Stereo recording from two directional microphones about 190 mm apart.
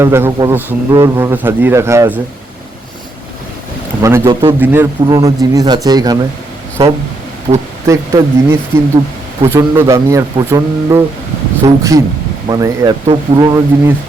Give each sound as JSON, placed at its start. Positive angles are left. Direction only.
{"t": 0.0, "sound": "a man's voice", "side_deg": -15}
{"t": 4.0, "sound": "a man's voice", "side_deg": -15}
{"t": 7.5, "sound": "speech", "side_deg": -30}
{"t": 7.9, "sound": "a man's voice", "side_deg": -15}
{"t": 9.6, "sound": "a man's voice", "side_deg": -15}